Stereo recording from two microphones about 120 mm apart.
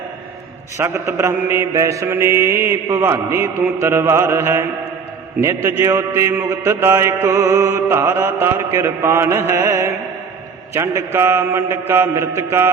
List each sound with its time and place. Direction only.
0.8 s mantra: 25° right (ahead or behind)